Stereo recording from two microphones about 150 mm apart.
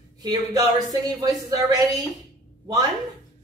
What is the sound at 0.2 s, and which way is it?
Speech, 25° right (ahead or behind).